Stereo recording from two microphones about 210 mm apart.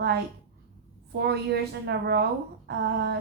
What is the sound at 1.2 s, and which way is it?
A woman's voice, 50° right (ahead or behind).